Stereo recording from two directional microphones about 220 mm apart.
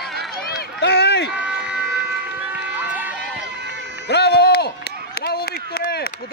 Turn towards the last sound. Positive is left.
turn(degrees=45)  # may be behind; listen again after turning